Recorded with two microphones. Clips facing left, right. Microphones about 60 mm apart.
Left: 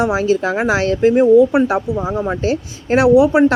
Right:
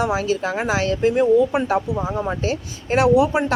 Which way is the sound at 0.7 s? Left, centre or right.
Left.